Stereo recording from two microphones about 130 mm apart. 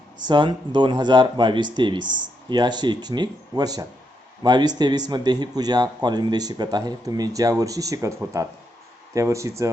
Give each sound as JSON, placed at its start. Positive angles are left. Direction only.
{"t": 0.2, "sound": "speech", "side_deg": -35}